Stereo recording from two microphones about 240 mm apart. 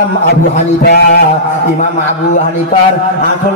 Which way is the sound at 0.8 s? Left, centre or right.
Left.